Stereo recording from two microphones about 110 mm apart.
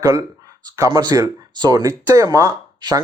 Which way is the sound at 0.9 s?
40° right (ahead or behind).